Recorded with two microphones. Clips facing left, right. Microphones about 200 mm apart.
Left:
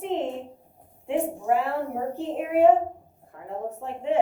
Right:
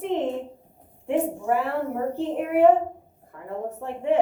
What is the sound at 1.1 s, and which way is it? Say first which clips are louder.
Speech: right 1 dB; 60° right (ahead or behind).